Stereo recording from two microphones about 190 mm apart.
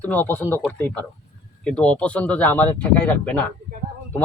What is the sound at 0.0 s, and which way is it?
Speech, 10° left (ahead or behind).